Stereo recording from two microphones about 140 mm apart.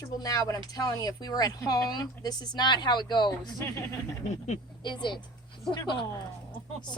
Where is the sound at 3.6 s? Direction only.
20° left (ahead or behind).